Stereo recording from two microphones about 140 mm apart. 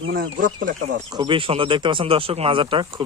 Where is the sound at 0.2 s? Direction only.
80° right.